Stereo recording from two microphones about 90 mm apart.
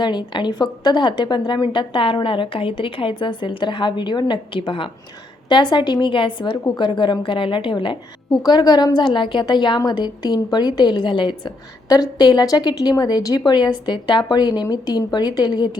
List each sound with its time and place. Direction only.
0.0 s a woman's voice: 55° left (ahead or behind); by 4.9 s 75° left (ahead or behind)
5.5 s a woman's voice: 60° left (ahead or behind)
8.3 s a woman's voice: 45° left (ahead or behind)